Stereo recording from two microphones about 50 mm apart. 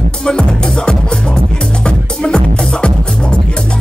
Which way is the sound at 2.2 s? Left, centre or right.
Centre.